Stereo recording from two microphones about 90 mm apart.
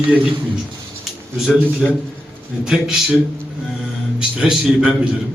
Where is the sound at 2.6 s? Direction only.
10° right (ahead or behind).